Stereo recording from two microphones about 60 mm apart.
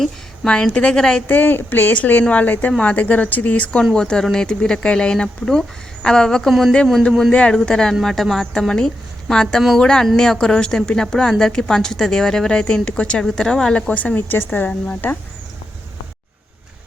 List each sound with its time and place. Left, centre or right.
0.4 s a woman's voice: centre
1.3 s a woman's voice: left
14.2 s speech: left